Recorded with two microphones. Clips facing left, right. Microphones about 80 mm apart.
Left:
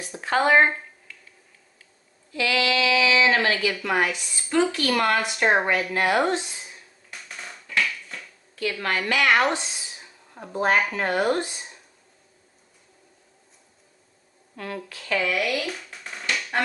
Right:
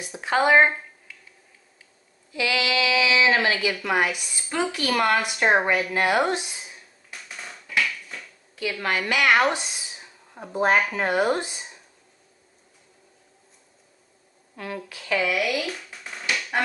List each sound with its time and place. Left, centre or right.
0.0 s speech: centre
1.1 s finger snapping: centre
2.3 s speech: centre
8.8 s speech: centre
14.6 s drum: centre